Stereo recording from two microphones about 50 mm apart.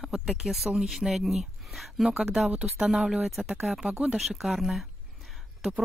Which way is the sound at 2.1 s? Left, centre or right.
Centre.